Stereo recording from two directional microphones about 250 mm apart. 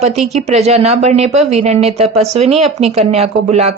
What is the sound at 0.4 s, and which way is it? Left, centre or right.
Speech, right.